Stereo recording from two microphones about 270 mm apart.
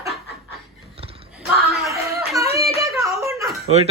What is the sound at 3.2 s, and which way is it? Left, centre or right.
Whimper, centre.